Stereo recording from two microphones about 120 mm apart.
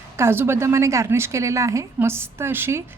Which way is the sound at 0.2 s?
20° right (ahead or behind).